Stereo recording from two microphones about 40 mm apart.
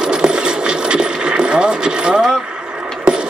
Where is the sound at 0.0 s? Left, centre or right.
Right.